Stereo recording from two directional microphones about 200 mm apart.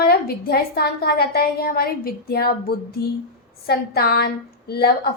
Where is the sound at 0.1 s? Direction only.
50° left (ahead or behind).